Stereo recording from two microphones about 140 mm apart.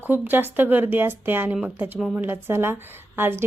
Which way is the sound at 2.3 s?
15° right (ahead or behind).